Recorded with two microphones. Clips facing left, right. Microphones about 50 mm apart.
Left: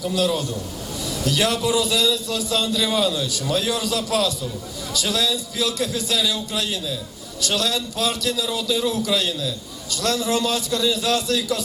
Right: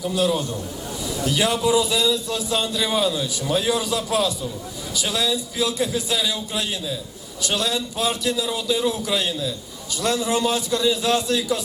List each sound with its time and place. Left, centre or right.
0.0 s a man's voice: centre